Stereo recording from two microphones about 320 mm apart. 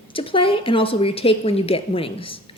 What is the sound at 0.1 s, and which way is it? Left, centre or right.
A woman's voice, centre.